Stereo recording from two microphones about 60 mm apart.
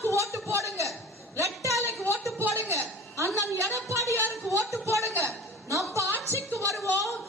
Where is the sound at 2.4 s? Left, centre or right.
Right.